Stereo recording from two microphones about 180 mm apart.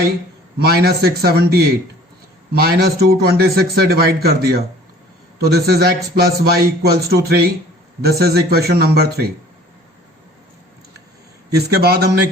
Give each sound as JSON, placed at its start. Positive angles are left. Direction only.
{"t": 0.6, "sound": "a man's voice", "side_deg": -60}
{"t": 11.5, "sound": "a man's voice", "side_deg": -65}